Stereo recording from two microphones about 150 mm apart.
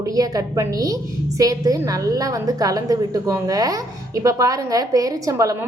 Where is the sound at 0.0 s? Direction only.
25° right (ahead or behind).